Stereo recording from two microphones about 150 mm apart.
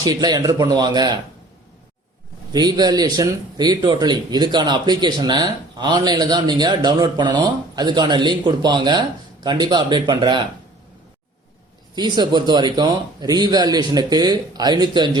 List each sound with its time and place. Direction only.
0.0 s a man's voice: 25° right (ahead or behind)
2.5 s a man's voice: 25° right (ahead or behind)
11.9 s a man's voice: 30° right (ahead or behind)